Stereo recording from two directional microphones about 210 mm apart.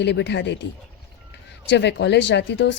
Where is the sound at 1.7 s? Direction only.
55° left (ahead or behind).